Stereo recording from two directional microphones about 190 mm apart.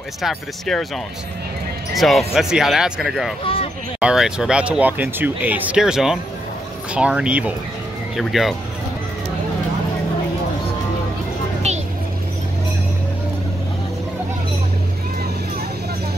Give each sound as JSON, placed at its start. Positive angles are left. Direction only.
{"t": 0.2, "sound": "speech", "side_deg": 0}
{"t": 2.0, "sound": "speech", "side_deg": 0}
{"t": 11.6, "sound": "vehicle", "side_deg": -35}